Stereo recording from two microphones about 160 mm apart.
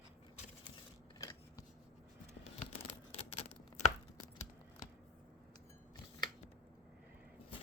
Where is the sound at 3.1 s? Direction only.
40° left (ahead or behind).